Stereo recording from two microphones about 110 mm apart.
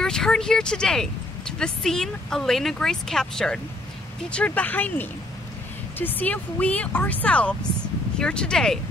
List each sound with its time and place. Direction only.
0.0 s speech: 5° left (ahead or behind)